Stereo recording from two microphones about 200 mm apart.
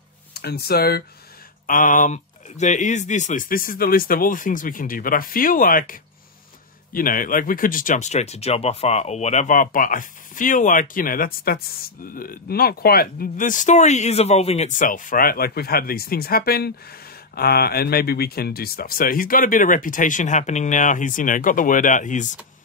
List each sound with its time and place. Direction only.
0.3 s speech: 50° left (ahead or behind)
1.7 s speech: 40° left (ahead or behind)